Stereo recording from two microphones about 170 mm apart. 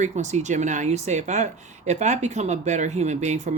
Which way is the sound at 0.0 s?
45° right (ahead or behind).